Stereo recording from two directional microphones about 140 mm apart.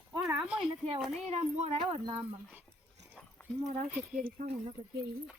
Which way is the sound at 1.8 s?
35° right (ahead or behind).